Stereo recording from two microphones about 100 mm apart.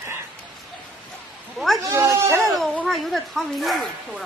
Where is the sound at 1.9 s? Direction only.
30° right (ahead or behind).